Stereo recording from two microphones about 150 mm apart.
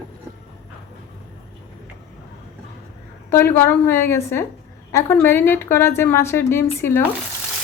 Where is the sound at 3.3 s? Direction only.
15° left (ahead or behind).